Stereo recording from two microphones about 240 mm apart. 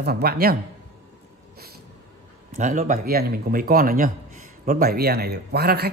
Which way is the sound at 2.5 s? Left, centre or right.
Right.